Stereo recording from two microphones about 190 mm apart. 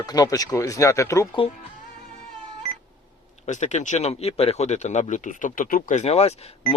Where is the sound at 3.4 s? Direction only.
40° left (ahead or behind).